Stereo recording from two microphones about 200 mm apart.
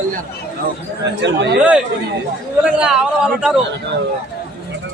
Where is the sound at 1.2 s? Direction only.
60° right (ahead or behind).